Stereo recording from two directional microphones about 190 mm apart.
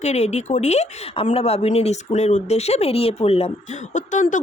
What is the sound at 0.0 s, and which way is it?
Speech, 35° left (ahead or behind).